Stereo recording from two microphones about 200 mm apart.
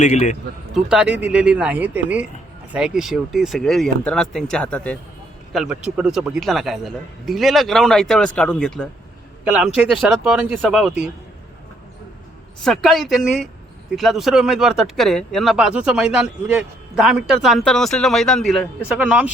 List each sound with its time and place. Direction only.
0.0 s a man's voice: 35° left (ahead or behind)
0.7 s speech: 5° right (ahead or behind)
5.5 s speech: 5° right (ahead or behind)
12.6 s speech: centre (ahead or behind)